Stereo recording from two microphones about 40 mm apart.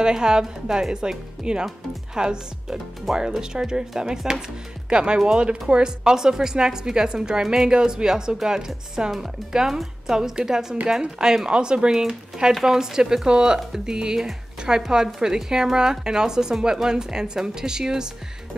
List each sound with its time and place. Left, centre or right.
0.0 s a woman's voice: centre